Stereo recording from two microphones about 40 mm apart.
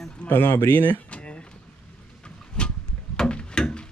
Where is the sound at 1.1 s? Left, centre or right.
Left.